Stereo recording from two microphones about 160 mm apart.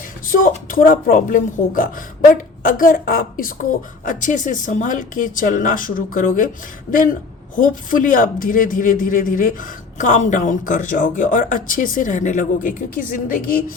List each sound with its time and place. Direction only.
0.3 s a man's voice: 60° left (ahead or behind)
7.5 s a man's voice: 55° left (ahead or behind)